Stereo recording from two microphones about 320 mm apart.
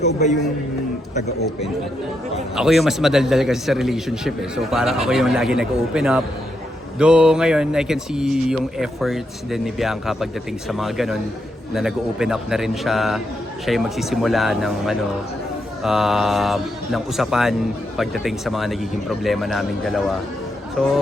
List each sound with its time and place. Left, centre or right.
0.0 s a man's voice: left
2.6 s a man's voice: centre